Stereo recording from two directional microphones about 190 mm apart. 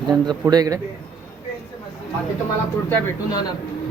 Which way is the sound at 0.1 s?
20° right (ahead or behind).